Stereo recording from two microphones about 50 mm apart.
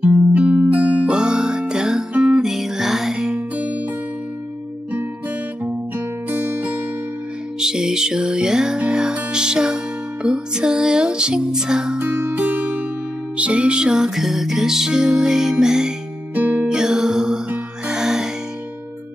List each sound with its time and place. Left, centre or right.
0.0 s music: right
1.0 s music: centre
2.4 s music: centre
3.3 s music: right
5.6 s music: right
7.6 s music: centre
12.0 s music: right; by 15.9 s centre
16.3 s music: right
16.6 s music: centre